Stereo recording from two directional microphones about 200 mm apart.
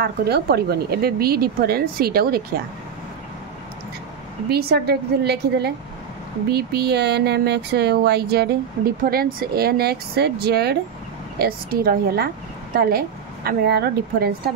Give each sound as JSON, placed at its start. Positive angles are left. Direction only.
{"t": 0.0, "sound": "speech", "side_deg": -50}
{"t": 4.5, "sound": "speech", "side_deg": -50}